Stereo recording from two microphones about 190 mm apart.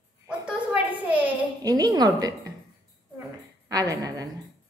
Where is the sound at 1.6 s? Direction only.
20° right (ahead or behind).